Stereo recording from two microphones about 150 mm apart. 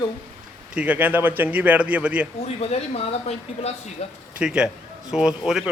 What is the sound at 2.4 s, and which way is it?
Speech, 45° left (ahead or behind).